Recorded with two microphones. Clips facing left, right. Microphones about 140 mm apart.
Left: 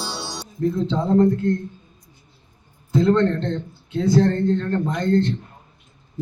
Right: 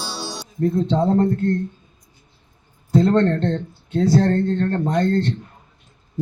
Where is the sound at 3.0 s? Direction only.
35° right (ahead or behind).